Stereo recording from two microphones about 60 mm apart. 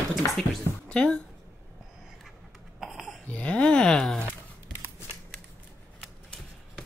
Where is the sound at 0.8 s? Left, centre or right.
Centre.